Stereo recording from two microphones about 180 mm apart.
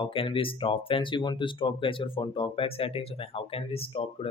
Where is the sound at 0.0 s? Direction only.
30° left (ahead or behind).